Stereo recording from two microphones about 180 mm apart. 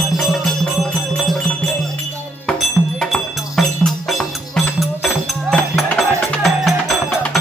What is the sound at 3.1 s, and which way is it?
Music, 5° left (ahead or behind).